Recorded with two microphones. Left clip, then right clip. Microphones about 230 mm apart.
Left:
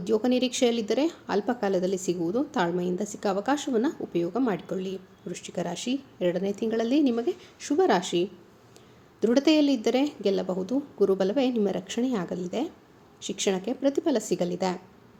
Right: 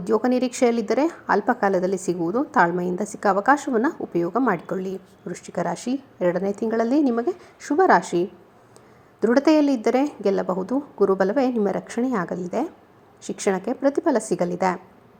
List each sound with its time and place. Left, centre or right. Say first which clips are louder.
0.0 s a woman's voice: right 4 dB; centre